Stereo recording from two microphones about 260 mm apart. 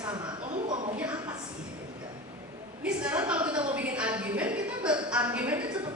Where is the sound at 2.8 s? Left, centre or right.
Centre.